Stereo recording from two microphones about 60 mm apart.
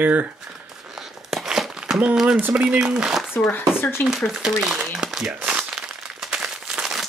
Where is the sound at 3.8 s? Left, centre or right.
Left.